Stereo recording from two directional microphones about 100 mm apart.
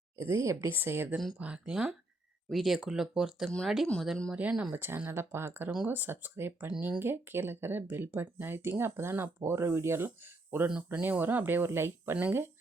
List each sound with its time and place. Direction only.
0.2 s speech: 30° right (ahead or behind); by 3.8 s centre (ahead or behind)
4.3 s speech: 10° right (ahead or behind)
10.7 s speech: 10° right (ahead or behind)